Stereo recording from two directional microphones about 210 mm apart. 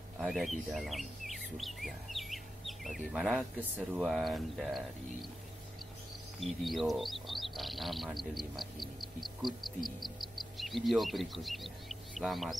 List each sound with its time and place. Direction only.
0.2 s speech: centre (ahead or behind)
6.4 s speech: centre (ahead or behind)